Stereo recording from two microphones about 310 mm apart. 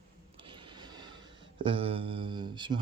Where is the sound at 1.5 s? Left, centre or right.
Centre.